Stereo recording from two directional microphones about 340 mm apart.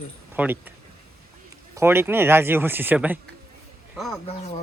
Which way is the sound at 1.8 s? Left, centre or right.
Centre.